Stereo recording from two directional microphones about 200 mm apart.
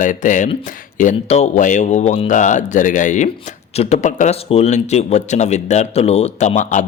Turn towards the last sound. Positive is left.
turn(degrees=40)  # may be behind; listen again after turning